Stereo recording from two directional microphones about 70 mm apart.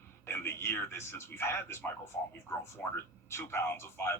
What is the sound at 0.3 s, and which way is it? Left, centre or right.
A man's voice, left.